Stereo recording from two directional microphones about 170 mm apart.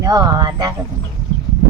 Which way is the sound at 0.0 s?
25° right (ahead or behind).